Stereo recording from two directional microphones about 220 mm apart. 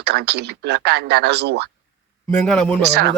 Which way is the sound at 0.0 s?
50° right (ahead or behind).